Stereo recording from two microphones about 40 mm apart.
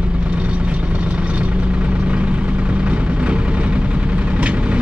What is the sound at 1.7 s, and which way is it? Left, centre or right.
Vehicle, right.